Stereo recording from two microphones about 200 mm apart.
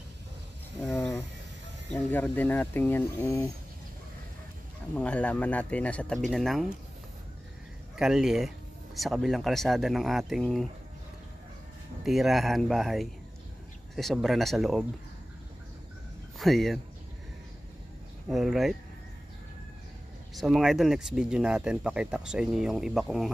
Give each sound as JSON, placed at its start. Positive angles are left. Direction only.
{"t": 0.8, "sound": "a sound", "side_deg": 10}
{"t": 1.9, "sound": "speech", "side_deg": 5}
{"t": 4.9, "sound": "speech", "side_deg": 5}
{"t": 8.0, "sound": "speech", "side_deg": 0}
{"t": 12.0, "sound": "speech", "side_deg": 0}
{"t": 16.3, "sound": "speech", "side_deg": 0}
{"t": 18.3, "sound": "speech", "side_deg": 0}
{"t": 20.3, "sound": "speech", "side_deg": 0}